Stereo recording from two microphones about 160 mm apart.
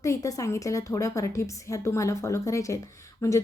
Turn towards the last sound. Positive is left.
turn(degrees=20)  # may be behind; listen again after turning